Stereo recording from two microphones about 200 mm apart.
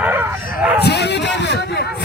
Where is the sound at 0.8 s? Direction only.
55° left (ahead or behind).